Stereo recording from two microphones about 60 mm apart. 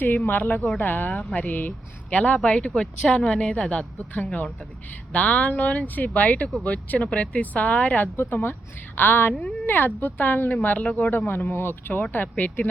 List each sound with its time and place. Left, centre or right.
0.0 s speech: left
8.1 s speech: left
11.3 s speech: left